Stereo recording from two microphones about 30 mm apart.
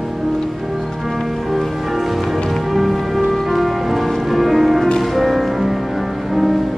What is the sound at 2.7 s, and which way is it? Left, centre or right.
Music, centre.